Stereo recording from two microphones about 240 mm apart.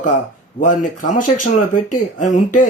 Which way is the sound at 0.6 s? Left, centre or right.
Left.